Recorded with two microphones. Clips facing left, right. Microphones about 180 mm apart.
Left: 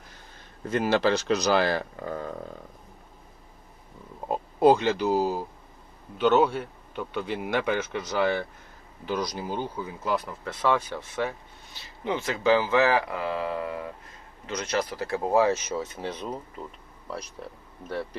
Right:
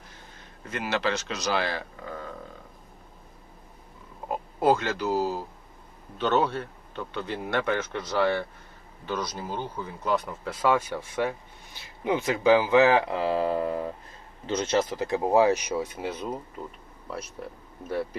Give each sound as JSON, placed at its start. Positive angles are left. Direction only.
{"t": 0.7, "sound": "speech", "side_deg": 30}
{"t": 4.3, "sound": "speech", "side_deg": 20}